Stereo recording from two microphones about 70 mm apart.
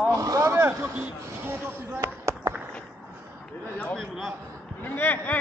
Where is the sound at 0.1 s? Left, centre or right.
Right.